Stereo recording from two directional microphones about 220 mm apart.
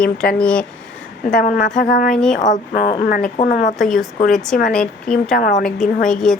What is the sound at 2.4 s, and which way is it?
A woman's voice, 35° left (ahead or behind).